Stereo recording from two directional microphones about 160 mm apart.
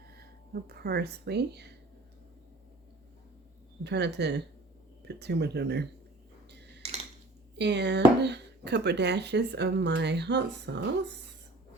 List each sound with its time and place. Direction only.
0.2 s speech: 80° right
3.8 s speech: 90° right
6.8 s a sound: 40° right (ahead or behind)
7.6 s speech: 90° right